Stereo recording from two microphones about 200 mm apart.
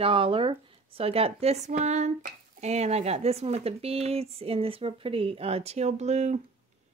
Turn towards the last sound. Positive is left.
turn(degrees=-35)  # may be behind; listen again after turning